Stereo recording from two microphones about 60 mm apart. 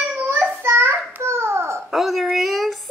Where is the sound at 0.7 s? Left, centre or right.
Right.